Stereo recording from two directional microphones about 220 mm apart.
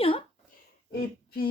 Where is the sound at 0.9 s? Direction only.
45° left (ahead or behind).